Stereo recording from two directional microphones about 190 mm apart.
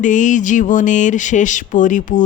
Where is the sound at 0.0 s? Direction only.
40° left (ahead or behind).